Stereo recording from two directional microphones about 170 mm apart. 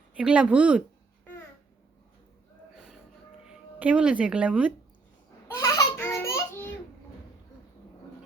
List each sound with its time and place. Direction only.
0.2 s speech: 5° right (ahead or behind)
2.7 s music: 5° right (ahead or behind)
3.4 s speech: 5° right (ahead or behind)
5.5 s baby laughter: 20° left (ahead or behind)